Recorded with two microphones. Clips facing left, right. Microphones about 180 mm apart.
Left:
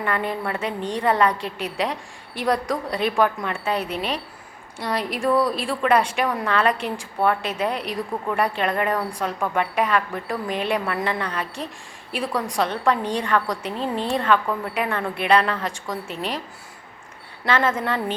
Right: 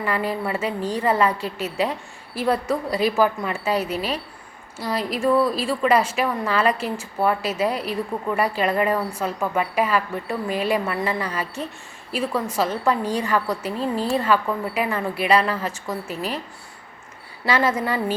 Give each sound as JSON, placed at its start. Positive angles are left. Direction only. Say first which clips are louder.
{"t": 0.0, "sound": "a woman's voice", "louder": "right 1 dB", "side_deg": -5}
{"t": 17.4, "sound": "a woman's voice", "louder": "right 1 dB", "side_deg": -10}